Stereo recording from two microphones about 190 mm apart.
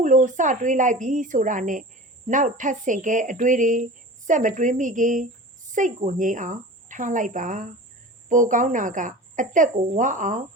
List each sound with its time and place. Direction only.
0.0 s a woman's voice: 40° right (ahead or behind)